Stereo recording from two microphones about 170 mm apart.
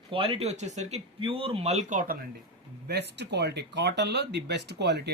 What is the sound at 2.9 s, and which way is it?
Speech, 80° right.